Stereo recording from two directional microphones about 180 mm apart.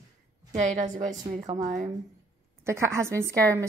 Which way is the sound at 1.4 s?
25° right (ahead or behind).